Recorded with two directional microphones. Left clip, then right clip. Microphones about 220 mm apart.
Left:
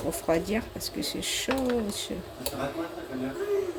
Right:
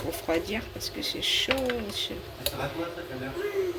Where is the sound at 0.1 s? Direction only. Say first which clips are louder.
Left 2 dB; 20° left (ahead or behind).